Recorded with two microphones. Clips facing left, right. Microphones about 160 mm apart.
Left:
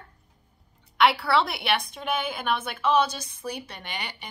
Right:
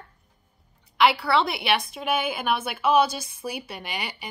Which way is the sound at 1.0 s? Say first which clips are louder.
Right 1 dB; centre (ahead or behind).